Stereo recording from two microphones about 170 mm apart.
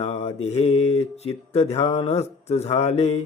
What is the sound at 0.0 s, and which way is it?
Mantra, 40° left (ahead or behind).